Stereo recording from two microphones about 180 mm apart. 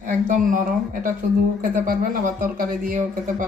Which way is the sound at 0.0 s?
45° right (ahead or behind).